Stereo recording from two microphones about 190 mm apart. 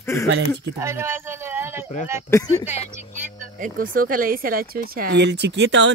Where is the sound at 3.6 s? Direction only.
45° right (ahead or behind); by 5.9 s 70° right (ahead or behind).